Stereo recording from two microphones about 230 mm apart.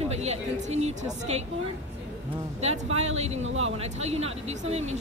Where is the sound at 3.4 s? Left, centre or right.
Right.